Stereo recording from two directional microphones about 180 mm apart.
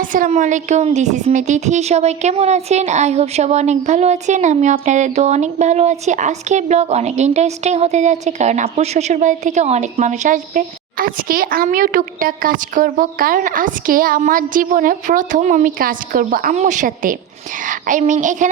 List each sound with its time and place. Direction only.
0.0 s speech: 50° right (ahead or behind)